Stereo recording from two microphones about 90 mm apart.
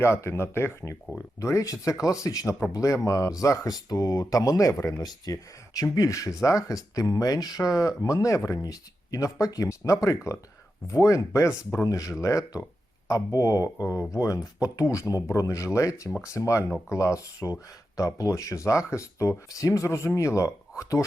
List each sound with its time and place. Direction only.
0.0 s speech: 30° left (ahead or behind)